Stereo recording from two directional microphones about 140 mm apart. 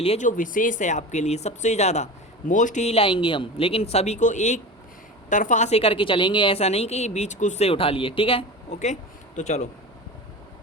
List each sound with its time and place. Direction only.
0.2 s speech: 70° left (ahead or behind); by 2.0 s 50° left (ahead or behind)
2.5 s a woman's voice: 65° left (ahead or behind); by 8.8 s 40° left (ahead or behind)
8.8 s speech: 60° left (ahead or behind)